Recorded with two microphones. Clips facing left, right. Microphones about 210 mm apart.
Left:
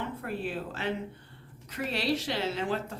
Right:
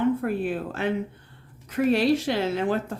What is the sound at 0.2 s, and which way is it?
Speech, 50° right (ahead or behind).